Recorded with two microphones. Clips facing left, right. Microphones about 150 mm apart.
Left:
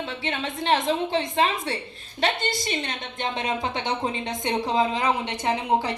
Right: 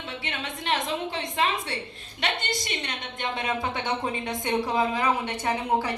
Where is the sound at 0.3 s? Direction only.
30° left (ahead or behind).